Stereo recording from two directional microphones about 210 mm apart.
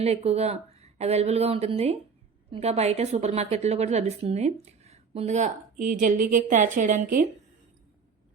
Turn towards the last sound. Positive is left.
turn(degrees=-35)  # may be behind; listen again after turning